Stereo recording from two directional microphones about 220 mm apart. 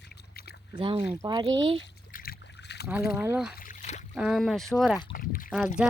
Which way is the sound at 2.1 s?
45° left (ahead or behind).